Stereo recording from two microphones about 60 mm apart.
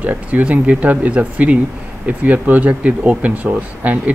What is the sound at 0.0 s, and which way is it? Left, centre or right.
Speech, right.